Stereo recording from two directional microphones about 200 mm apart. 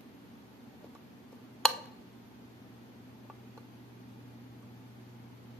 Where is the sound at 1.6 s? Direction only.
5° left (ahead or behind).